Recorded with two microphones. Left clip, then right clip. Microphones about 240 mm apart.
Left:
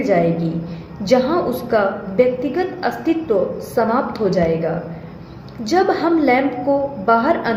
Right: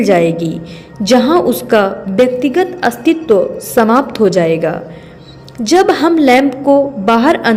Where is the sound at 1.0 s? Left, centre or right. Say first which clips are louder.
Right 6 dB; right.